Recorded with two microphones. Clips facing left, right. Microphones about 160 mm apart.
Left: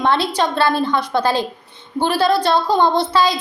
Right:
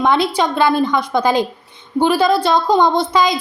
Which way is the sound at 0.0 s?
15° right (ahead or behind).